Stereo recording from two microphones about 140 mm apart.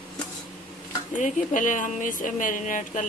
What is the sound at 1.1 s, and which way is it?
Speech, 65° left (ahead or behind).